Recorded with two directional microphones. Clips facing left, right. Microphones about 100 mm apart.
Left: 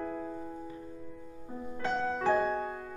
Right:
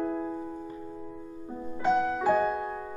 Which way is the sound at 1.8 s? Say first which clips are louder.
Right 6 dB; 10° right (ahead or behind).